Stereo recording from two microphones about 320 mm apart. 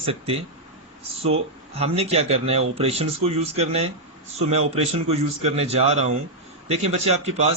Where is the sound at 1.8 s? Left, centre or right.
Centre.